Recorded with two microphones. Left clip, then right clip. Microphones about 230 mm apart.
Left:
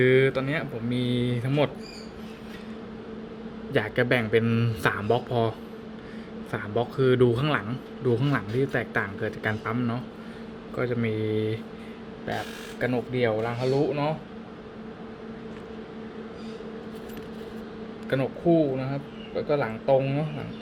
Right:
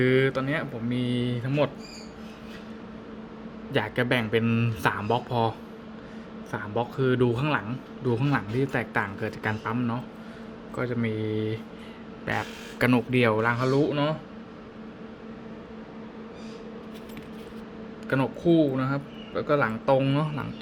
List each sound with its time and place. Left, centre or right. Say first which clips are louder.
0.0 s a man's voice: left 2 dB; centre
3.7 s a man's voice: left 2 dB; centre
12.8 s speech: right 3 dB; right
13.6 s speech: right 1 dB; centre
18.1 s speech: even; centre